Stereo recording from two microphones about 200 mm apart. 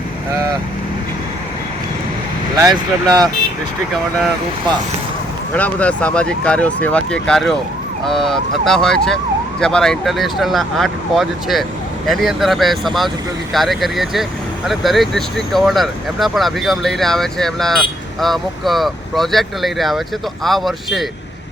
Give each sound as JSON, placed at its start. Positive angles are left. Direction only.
{"t": 2.6, "sound": "speech", "side_deg": -20}
{"t": 5.5, "sound": "speech", "side_deg": 5}